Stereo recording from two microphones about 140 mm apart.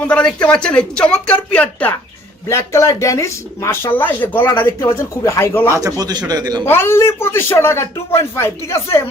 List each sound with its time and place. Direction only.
0.0 s a man's voice: 10° left (ahead or behind)
5.6 s a man's voice: 20° right (ahead or behind)
6.7 s a man's voice: 15° left (ahead or behind)